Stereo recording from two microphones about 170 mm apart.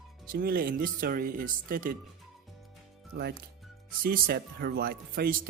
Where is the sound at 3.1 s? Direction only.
60° right (ahead or behind).